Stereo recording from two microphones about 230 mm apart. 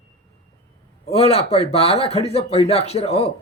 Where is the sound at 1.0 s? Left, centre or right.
Left.